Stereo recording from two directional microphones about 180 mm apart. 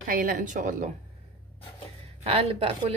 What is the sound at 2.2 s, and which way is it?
Speech, 35° right (ahead or behind).